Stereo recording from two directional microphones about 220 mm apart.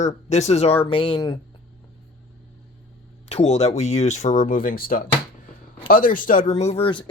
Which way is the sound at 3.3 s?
30° left (ahead or behind).